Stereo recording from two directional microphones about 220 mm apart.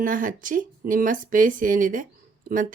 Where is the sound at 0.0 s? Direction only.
35° right (ahead or behind).